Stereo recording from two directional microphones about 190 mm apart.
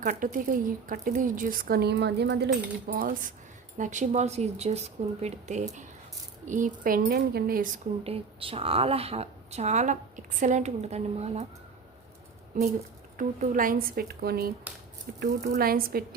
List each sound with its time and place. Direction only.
0.0 s a woman's voice: 45° right (ahead or behind); by 2.5 s 65° right (ahead or behind)
2.8 s a woman's voice: 50° right (ahead or behind)
8.0 s a woman's voice: 30° right (ahead or behind)
13.1 s a woman's voice: 45° right (ahead or behind)